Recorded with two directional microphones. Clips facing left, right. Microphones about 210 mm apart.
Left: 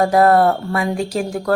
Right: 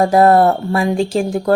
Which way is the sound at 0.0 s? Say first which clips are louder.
Right 2 dB; 25° right (ahead or behind).